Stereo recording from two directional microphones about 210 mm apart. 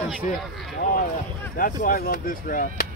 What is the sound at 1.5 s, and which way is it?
Speech, 40° left (ahead or behind).